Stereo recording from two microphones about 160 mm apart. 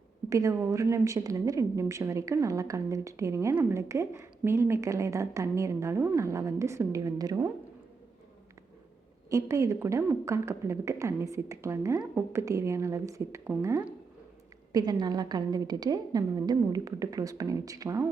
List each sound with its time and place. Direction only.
0.3 s a woman's voice: 20° right (ahead or behind)
9.3 s a woman's voice: 20° right (ahead or behind)